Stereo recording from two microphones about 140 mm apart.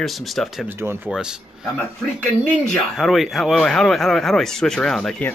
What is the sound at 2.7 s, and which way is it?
Speech, centre (ahead or behind).